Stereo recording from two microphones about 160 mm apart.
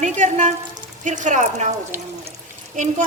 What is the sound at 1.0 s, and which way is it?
Speech, 50° right (ahead or behind).